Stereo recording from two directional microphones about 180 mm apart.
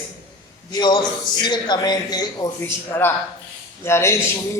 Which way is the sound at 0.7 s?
25° left (ahead or behind).